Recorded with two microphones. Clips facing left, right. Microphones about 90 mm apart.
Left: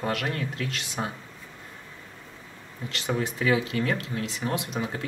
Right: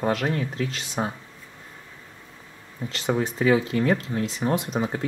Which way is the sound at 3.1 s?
30° right (ahead or behind).